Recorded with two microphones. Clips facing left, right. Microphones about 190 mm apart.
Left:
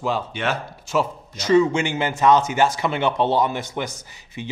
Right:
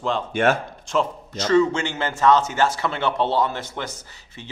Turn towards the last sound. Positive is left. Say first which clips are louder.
# left 8 dB
turn(degrees=15)  # may be behind; listen again after turning